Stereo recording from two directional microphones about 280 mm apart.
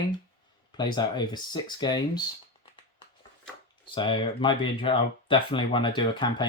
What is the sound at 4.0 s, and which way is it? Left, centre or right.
Speech, centre.